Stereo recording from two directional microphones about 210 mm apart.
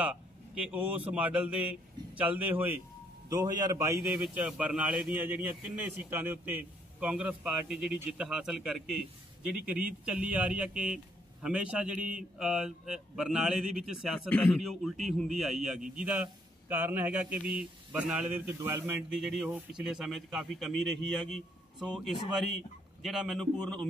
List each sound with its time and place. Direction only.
0.7 s a man's voice: 5° right (ahead or behind)